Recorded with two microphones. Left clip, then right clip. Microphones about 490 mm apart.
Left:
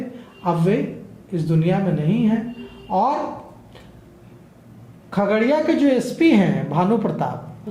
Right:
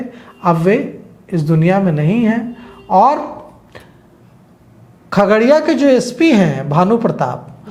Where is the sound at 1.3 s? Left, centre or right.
Right.